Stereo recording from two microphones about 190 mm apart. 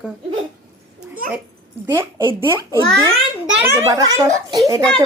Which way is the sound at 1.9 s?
15° right (ahead or behind).